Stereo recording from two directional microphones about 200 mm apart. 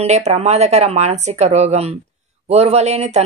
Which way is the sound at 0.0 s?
35° right (ahead or behind).